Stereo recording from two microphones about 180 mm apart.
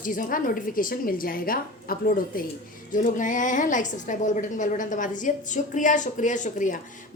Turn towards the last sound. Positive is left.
turn(degrees=45)  # may be behind; listen again after turning